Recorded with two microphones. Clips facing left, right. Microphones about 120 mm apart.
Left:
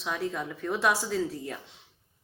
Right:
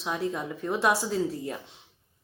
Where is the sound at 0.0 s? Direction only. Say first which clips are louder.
Right 2 dB; 20° right (ahead or behind).